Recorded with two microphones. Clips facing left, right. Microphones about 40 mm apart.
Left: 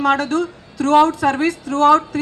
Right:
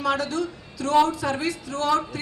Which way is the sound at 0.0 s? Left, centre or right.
Left.